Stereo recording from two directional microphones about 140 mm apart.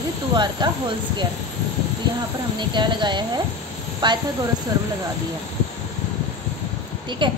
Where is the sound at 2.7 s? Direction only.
35° right (ahead or behind).